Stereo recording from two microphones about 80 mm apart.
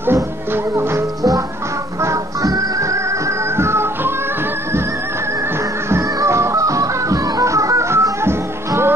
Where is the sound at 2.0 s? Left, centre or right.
Right.